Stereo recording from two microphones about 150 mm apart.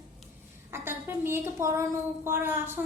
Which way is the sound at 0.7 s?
15° right (ahead or behind).